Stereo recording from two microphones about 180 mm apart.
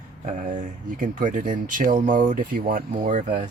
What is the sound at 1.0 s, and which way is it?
Speech, 45° right (ahead or behind).